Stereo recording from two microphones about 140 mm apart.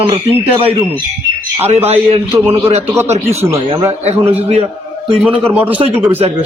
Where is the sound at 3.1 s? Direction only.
50° right (ahead or behind).